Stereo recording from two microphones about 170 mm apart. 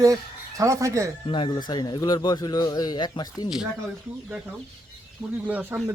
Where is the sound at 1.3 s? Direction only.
25° left (ahead or behind).